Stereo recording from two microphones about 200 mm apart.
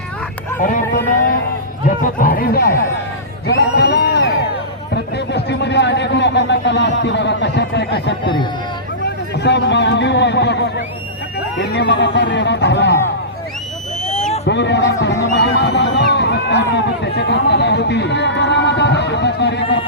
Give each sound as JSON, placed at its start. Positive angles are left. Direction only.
{"t": 0.6, "sound": "speech", "side_deg": 40}
{"t": 3.4, "sound": "a sound", "side_deg": 55}
{"t": 7.0, "sound": "speech", "side_deg": 60}
{"t": 14.4, "sound": "speech", "side_deg": 60}